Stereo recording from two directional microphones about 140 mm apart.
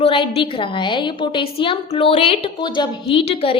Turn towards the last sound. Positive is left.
turn(degrees=45)  # may be behind; listen again after turning